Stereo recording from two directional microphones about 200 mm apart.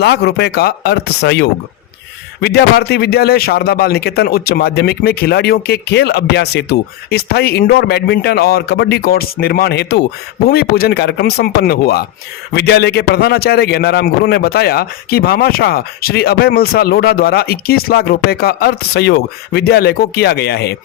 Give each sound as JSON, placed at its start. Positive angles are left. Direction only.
{"t": 0.0, "sound": "a man's voice", "side_deg": 55}